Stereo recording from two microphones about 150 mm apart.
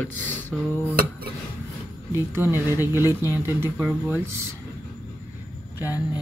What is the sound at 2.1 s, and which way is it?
A woman's voice, 15° right (ahead or behind).